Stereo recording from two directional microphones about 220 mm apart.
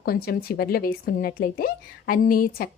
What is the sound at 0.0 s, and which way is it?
Speech, 45° left (ahead or behind).